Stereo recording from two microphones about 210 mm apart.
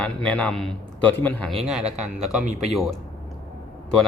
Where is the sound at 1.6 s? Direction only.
Centre (ahead or behind).